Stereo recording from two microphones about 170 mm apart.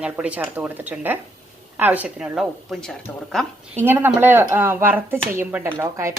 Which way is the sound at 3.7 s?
10° right (ahead or behind).